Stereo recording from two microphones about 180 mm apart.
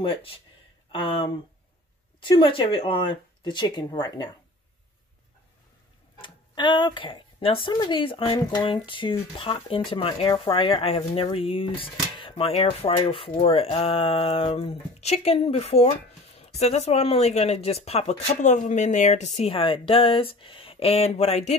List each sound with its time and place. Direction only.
0.0 s speech: 30° left (ahead or behind)
6.2 s speech: 25° left (ahead or behind)